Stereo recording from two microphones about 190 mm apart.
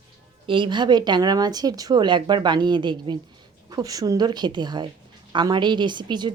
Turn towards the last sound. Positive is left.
turn(degrees=-25)  # may be behind; listen again after turning